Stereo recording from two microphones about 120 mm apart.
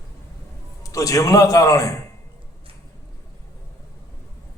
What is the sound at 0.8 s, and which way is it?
A man's voice, 30° left (ahead or behind).